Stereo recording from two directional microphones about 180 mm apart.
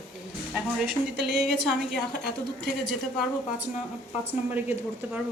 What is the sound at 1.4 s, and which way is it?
A woman's voice, centre (ahead or behind).